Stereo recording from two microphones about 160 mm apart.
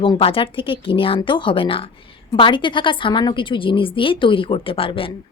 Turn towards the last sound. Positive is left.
turn(degrees=35)  # may be behind; listen again after turning